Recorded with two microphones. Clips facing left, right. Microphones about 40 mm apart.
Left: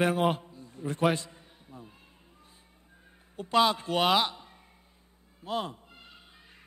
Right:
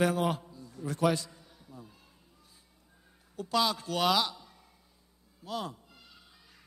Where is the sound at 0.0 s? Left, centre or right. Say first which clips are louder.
Left 2 dB; left.